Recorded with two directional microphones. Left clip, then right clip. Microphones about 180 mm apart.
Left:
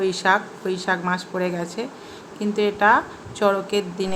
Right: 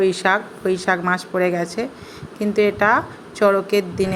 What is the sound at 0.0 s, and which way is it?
A woman's voice, 20° right (ahead or behind).